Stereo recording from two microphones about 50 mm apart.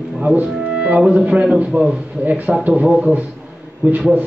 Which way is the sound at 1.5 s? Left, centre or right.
Right.